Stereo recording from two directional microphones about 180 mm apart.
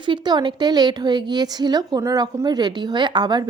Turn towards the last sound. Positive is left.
turn(degrees=-25)  # may be behind; listen again after turning